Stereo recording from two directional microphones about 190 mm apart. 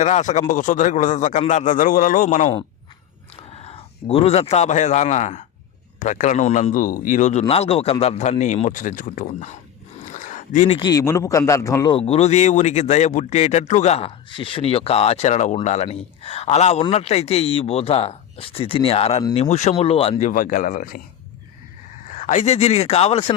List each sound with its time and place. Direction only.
0.0 s speech: 40° left (ahead or behind)
3.5 s speech: 30° left (ahead or behind)
10.0 s a sound: 40° left (ahead or behind)
10.8 s speech: 20° left (ahead or behind); by 21.0 s 45° left (ahead or behind)
22.1 s speech: 40° left (ahead or behind)